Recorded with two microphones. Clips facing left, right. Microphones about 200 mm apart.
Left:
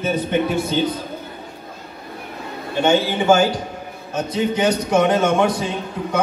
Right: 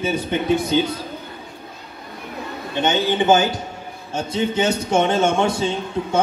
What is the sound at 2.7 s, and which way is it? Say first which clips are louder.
A man's voice: left 3 dB; 20° right (ahead or behind).